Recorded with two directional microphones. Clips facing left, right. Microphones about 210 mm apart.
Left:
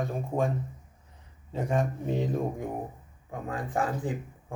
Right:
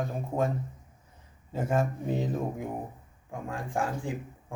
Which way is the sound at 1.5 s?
5° right (ahead or behind).